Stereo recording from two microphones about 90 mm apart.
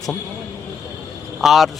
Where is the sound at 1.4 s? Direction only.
5° right (ahead or behind).